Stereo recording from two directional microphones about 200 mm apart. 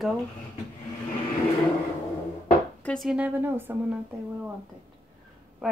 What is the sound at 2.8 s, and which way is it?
A woman's voice, centre (ahead or behind).